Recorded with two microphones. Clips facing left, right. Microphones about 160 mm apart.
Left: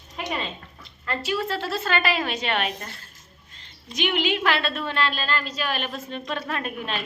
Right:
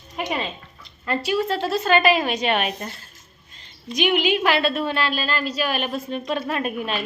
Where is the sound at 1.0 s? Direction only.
15° right (ahead or behind).